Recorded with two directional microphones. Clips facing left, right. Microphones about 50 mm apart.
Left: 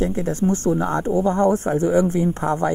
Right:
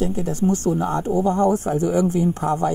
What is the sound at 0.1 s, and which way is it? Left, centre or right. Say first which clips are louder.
Speech: even; left.